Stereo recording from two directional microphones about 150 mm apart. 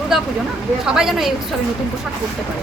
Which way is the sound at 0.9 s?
5° right (ahead or behind).